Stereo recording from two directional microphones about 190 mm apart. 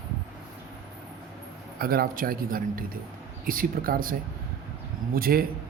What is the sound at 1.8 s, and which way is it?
A man's voice, 50° right (ahead or behind).